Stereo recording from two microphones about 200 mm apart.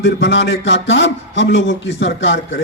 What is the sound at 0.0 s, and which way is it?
Speech, 65° left (ahead or behind).